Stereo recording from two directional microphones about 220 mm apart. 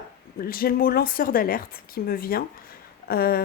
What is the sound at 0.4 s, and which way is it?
Speech, 40° left (ahead or behind).